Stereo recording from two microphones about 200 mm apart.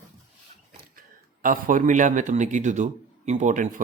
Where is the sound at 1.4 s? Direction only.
45° right (ahead or behind).